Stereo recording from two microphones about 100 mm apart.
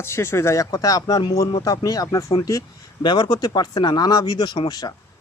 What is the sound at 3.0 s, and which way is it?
Speech, 45° left (ahead or behind).